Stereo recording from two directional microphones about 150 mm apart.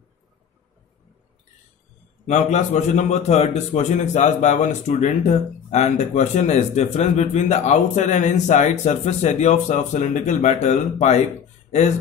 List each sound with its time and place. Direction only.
2.2 s a man's voice: 50° left (ahead or behind)